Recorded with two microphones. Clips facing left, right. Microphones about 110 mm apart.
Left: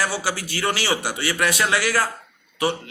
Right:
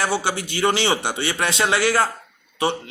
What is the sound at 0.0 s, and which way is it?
A man's voice, 25° right (ahead or behind).